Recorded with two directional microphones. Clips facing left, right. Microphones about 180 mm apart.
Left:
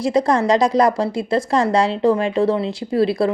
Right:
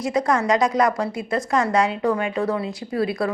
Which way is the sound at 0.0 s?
30° left (ahead or behind).